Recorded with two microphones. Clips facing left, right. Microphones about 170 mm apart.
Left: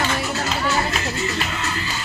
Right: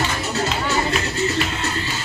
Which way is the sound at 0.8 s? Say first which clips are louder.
Right 3 dB; 30° right (ahead or behind).